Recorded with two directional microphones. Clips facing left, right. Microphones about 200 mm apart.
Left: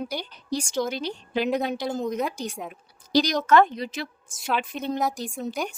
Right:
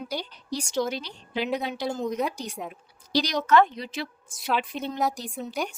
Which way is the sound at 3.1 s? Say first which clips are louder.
Left 2 dB; 45° left (ahead or behind).